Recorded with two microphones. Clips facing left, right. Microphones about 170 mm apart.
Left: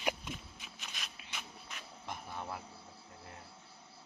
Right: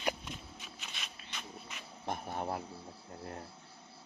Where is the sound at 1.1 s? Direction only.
10° left (ahead or behind).